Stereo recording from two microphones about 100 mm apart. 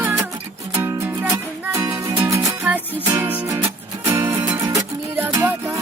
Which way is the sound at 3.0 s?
20° right (ahead or behind).